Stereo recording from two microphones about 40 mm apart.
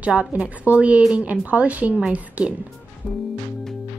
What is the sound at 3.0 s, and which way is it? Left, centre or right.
Music, left.